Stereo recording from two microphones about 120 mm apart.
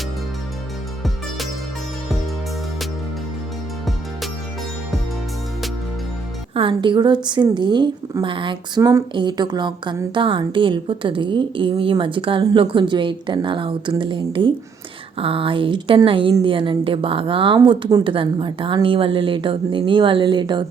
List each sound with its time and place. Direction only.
6.5 s a woman's voice: 45° right (ahead or behind)
8.8 s speech: 25° right (ahead or behind)
9.1 s a woman's voice: 40° right (ahead or behind)